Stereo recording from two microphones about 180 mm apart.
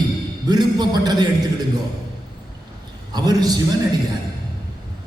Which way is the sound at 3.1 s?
20° right (ahead or behind).